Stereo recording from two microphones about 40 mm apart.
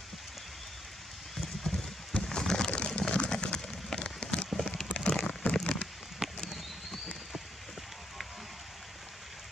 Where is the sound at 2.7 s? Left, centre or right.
Left.